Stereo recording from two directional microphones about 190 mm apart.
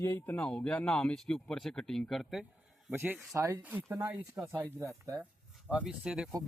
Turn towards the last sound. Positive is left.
turn(degrees=-5)  # may be behind; listen again after turning